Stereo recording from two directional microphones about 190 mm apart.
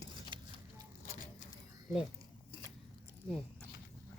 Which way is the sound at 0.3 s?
25° right (ahead or behind).